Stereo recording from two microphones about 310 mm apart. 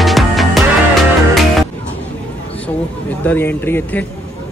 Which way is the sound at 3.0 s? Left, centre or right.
Centre.